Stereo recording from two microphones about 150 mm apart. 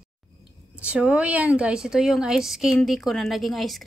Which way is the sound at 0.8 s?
5° right (ahead or behind).